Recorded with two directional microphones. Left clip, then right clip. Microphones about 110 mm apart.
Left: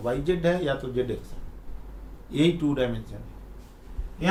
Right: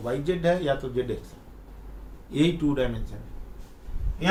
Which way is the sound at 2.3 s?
15° left (ahead or behind).